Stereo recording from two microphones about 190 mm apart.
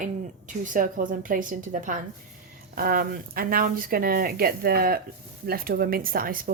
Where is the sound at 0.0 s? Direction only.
45° right (ahead or behind).